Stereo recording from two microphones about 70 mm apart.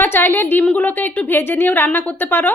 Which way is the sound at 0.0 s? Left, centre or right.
Left.